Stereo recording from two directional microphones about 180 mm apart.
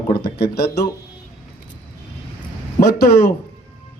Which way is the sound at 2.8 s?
60° left (ahead or behind).